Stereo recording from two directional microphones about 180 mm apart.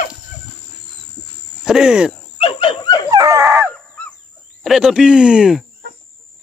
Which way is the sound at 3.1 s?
20° right (ahead or behind).